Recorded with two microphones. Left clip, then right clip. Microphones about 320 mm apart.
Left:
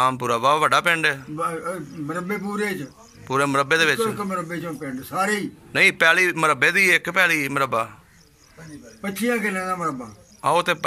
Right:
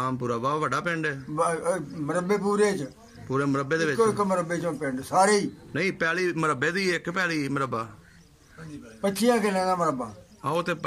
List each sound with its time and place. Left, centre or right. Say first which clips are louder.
0.0 s a man's voice: left 8 dB; centre
1.3 s a man's voice: right 1 dB; centre
3.3 s a man's voice: left 7 dB; centre
4.3 s a man's voice: right 1 dB; centre
5.3 s a man's voice: left 1 dB; centre
9.0 s a man's voice: right 1 dB; centre
10.4 s a man's voice: left 8 dB; centre